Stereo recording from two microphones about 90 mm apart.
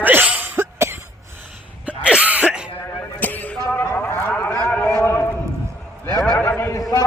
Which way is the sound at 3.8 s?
25° left (ahead or behind).